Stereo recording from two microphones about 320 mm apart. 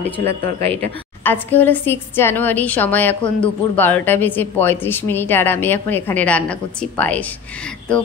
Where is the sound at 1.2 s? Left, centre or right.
Centre.